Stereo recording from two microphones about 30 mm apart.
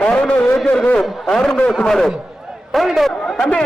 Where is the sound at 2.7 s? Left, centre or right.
Centre.